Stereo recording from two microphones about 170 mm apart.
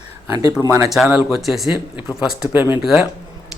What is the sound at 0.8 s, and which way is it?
Speech, centre (ahead or behind).